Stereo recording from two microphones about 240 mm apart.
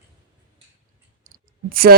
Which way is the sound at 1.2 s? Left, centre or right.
Right.